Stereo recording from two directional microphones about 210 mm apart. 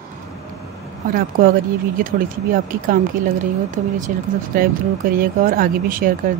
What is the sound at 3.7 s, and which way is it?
Speech, 35° right (ahead or behind).